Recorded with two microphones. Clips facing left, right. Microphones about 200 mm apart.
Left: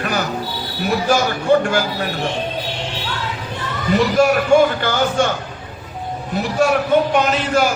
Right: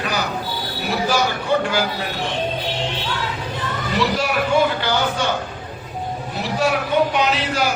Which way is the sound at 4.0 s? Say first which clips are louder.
Left 6 dB; 50° left (ahead or behind).